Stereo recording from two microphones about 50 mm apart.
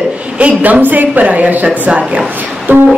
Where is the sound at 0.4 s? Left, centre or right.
Right.